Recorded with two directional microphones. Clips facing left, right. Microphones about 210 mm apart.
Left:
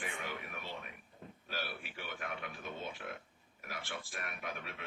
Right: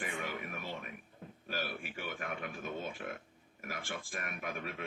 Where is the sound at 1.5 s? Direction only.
50° right (ahead or behind).